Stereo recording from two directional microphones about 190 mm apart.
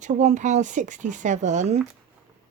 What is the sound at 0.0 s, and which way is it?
Speech, 40° right (ahead or behind).